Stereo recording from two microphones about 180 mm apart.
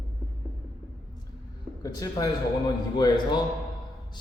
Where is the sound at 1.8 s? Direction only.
20° left (ahead or behind).